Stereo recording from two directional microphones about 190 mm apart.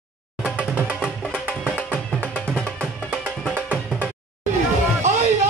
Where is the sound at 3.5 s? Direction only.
10° right (ahead or behind).